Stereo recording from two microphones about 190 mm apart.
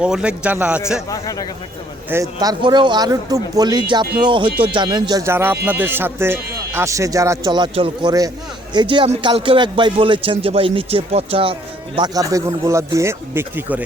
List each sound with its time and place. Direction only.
0.0 s speech: 5° right (ahead or behind)
1.1 s speech: 20° left (ahead or behind)
2.4 s a man's voice: 20° right (ahead or behind)